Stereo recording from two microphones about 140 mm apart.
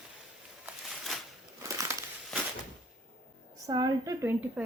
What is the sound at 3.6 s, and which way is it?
Speech, 25° right (ahead or behind).